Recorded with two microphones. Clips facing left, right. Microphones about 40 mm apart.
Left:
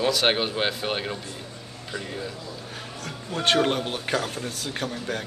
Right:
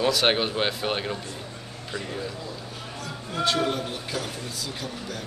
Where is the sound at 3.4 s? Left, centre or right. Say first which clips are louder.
Left 3 dB; left.